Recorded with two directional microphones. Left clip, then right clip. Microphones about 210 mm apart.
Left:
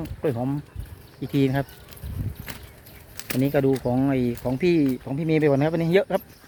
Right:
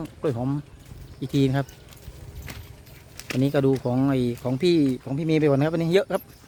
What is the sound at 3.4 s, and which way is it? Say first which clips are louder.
Speech: left 1 dB; 15° right (ahead or behind).